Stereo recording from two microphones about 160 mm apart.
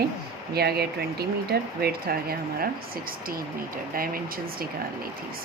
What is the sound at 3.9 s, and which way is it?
Speech, 65° right (ahead or behind).